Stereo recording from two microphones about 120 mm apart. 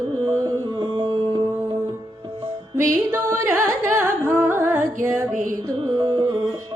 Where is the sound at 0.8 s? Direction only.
45° right (ahead or behind).